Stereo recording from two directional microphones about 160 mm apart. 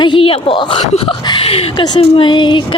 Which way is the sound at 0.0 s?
30° left (ahead or behind).